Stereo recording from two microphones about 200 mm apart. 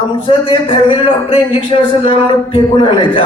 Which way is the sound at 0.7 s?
25° left (ahead or behind).